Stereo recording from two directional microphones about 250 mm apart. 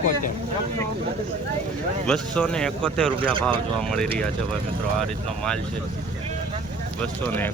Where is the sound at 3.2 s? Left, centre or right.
Right.